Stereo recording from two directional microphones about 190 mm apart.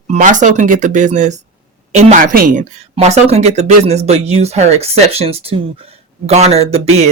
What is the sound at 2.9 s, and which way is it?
Speech, 35° right (ahead or behind).